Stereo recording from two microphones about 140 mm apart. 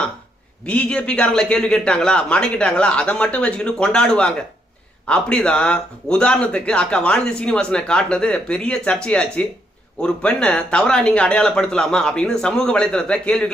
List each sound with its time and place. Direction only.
0.6 s speech: 10° left (ahead or behind)